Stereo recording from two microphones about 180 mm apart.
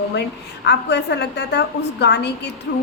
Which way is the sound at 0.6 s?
70° left (ahead or behind).